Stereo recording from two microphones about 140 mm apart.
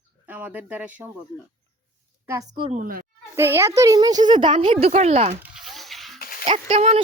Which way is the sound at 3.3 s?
20° right (ahead or behind).